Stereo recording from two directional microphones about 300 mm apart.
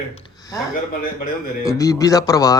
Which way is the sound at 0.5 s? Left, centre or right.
Centre.